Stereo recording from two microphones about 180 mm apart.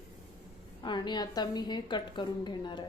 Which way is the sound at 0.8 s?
25° left (ahead or behind).